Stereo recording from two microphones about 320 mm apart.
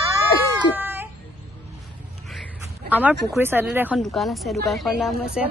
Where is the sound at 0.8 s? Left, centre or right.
Centre.